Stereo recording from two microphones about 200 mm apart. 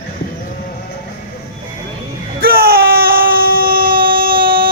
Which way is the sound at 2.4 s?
50° right (ahead or behind).